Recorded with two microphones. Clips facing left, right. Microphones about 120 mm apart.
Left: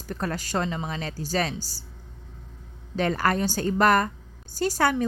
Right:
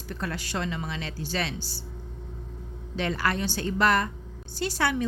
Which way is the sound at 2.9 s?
45° left (ahead or behind).